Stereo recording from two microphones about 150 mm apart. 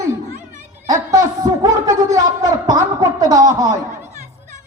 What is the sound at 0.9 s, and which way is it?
A woman's voice, 25° right (ahead or behind).